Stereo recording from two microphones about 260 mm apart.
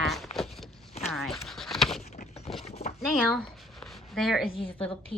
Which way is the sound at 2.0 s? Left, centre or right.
Left.